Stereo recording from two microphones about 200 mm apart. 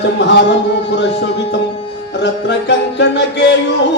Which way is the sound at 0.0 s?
60° left (ahead or behind).